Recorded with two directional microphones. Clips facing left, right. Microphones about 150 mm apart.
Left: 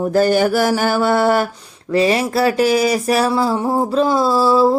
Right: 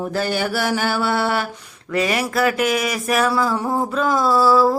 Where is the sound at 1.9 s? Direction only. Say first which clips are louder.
Left 5 dB; 30° left (ahead or behind).